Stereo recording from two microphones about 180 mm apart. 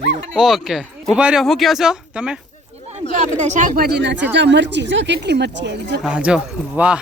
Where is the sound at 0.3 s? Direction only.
Centre (ahead or behind).